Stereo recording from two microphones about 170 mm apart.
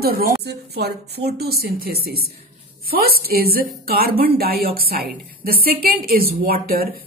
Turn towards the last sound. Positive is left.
turn(degrees=-60)  # may be behind; listen again after turning